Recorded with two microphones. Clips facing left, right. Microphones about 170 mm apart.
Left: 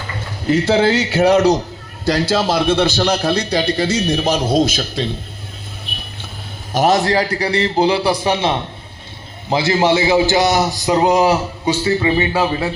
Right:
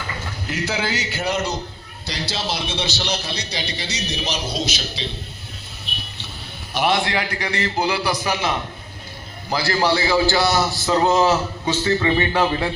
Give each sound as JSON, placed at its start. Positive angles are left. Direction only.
{"t": 0.6, "sound": "a man's voice", "side_deg": 30}
{"t": 1.2, "sound": "a man's voice", "side_deg": 70}
{"t": 2.0, "sound": "a man's voice", "side_deg": 50}
{"t": 6.7, "sound": "a man's voice", "side_deg": 40}